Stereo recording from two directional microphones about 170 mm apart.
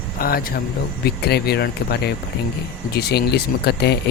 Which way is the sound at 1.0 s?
70° left (ahead or behind).